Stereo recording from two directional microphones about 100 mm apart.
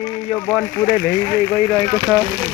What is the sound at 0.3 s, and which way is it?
Speech, 15° left (ahead or behind).